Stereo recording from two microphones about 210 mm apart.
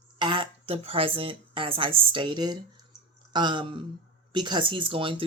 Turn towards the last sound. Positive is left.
turn(degrees=-25)  # may be behind; listen again after turning